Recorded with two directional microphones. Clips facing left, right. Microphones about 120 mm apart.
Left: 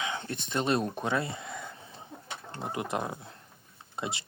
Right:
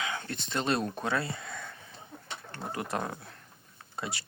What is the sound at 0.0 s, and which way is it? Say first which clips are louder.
Speech: left 1 dB; 25° left (ahead or behind).